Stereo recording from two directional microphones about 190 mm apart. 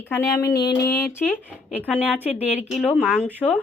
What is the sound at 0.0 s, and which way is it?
Speech, 15° left (ahead or behind).